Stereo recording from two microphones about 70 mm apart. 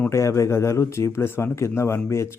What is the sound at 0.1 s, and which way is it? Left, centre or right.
Speech, left.